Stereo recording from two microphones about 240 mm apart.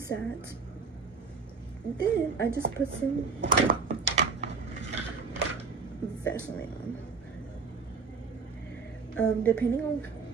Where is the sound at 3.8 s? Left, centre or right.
Right.